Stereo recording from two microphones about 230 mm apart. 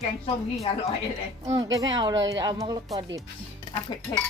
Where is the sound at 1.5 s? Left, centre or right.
Centre.